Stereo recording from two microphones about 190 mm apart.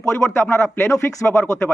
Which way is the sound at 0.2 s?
10° left (ahead or behind).